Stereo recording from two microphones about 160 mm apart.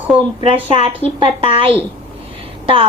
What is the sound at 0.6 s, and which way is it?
A woman's voice, 35° right (ahead or behind).